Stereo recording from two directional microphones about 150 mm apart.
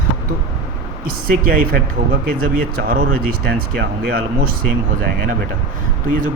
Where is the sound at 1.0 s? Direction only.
70° right (ahead or behind); by 4.2 s 90° right.